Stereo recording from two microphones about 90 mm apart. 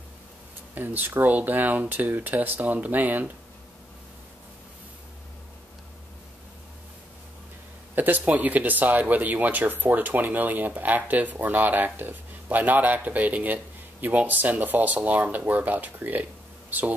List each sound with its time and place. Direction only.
0.7 s speech: 20° right (ahead or behind)
7.9 s speech: 20° right (ahead or behind)